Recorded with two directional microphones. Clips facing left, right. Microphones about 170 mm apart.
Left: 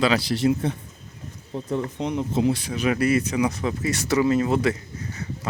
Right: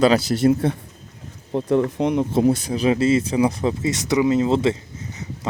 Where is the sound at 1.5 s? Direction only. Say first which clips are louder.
Right 8 dB; 65° right (ahead or behind).